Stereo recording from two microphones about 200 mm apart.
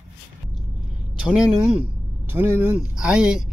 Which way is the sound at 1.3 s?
5° right (ahead or behind).